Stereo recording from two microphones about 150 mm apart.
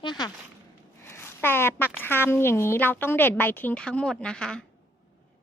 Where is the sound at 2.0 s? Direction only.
15° left (ahead or behind).